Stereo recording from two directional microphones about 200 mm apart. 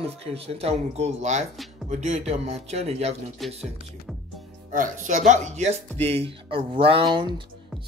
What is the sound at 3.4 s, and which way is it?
Speech, centre (ahead or behind).